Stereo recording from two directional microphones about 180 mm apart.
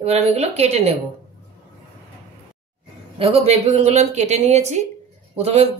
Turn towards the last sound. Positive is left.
turn(degrees=-35)  # may be behind; listen again after turning